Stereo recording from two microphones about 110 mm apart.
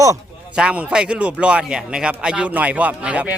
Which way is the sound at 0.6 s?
10° right (ahead or behind).